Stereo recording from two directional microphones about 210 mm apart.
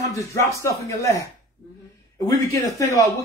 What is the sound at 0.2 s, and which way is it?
A man's voice, 15° left (ahead or behind).